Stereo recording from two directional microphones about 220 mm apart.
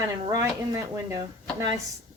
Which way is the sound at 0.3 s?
15° right (ahead or behind).